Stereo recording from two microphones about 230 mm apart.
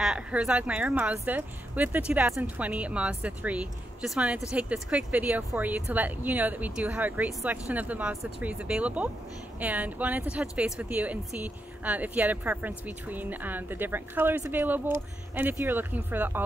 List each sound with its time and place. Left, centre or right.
0.0 s a woman's voice: centre